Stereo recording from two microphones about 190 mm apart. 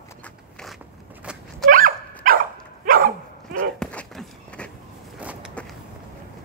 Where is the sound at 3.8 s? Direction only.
5° left (ahead or behind).